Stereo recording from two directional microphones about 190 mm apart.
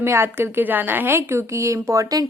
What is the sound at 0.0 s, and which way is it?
A woman's voice, 15° right (ahead or behind).